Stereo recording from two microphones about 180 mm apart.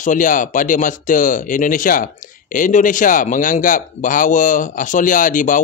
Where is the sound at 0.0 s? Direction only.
45° left (ahead or behind).